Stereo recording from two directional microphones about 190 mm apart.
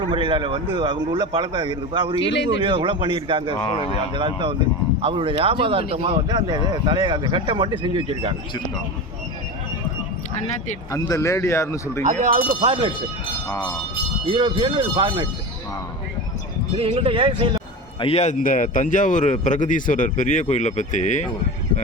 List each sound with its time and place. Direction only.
0.0 s speech: 25° right (ahead or behind)
2.2 s speech: 65° left (ahead or behind)
2.6 s speech: 25° right (ahead or behind)
3.5 s speech: 30° left (ahead or behind)
3.9 s speech: 25° right (ahead or behind)
10.9 s a man's voice: 15° left (ahead or behind)
12.2 s speech: 30° right (ahead or behind)
14.3 s speech: 25° right (ahead or behind)
16.7 s speech: 30° right (ahead or behind)
18.0 s speech: 35° left (ahead or behind)